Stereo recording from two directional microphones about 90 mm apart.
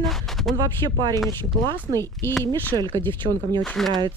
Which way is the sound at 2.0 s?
30° left (ahead or behind).